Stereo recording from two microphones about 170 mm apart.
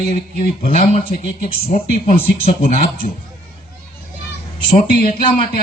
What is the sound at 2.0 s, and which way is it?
Speech, 40° left (ahead or behind).